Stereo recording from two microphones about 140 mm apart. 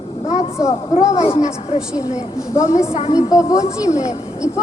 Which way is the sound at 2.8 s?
50° left (ahead or behind).